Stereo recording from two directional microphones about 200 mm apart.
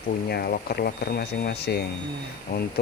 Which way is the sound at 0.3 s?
50° left (ahead or behind).